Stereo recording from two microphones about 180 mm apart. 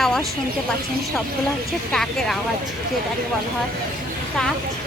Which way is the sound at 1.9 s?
Centre (ahead or behind).